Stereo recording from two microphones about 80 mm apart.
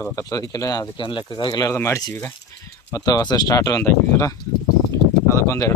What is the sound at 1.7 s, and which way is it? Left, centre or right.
Speech, left.